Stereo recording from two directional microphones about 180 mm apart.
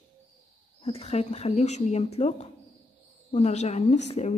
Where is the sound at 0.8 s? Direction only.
40° left (ahead or behind).